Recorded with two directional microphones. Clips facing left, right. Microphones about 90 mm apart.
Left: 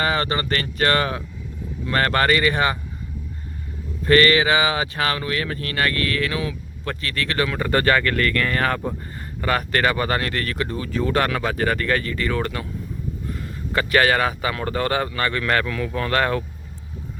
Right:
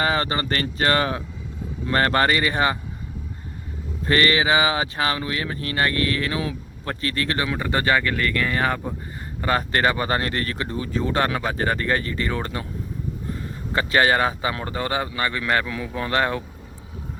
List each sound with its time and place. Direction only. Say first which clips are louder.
0.0 s speech: even; 25° right (ahead or behind)
4.0 s speech: left 4 dB; 25° right (ahead or behind)
13.7 s a man's voice: left 1 dB; 25° right (ahead or behind)